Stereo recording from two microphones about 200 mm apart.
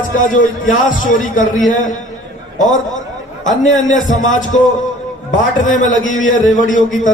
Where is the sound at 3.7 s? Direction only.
40° left (ahead or behind).